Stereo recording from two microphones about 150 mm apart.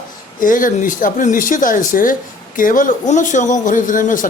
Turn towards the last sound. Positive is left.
turn(degrees=60)  # may be behind; listen again after turning